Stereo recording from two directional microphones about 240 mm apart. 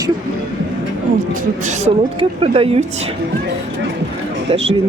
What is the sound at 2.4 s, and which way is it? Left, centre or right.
Speech, right.